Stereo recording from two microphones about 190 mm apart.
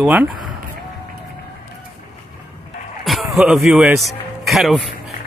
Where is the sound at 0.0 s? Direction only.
5° right (ahead or behind).